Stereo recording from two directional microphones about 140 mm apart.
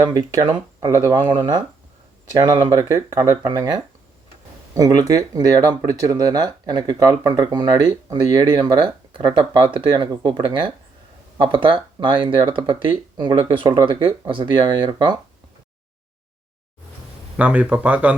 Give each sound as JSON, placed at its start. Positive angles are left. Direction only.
{"t": 0.0, "sound": "speech", "side_deg": -25}
{"t": 17.3, "sound": "speech", "side_deg": -10}